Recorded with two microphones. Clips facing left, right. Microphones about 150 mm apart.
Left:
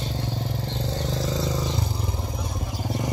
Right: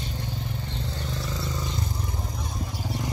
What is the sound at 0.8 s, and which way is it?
Vehicle, 90° left.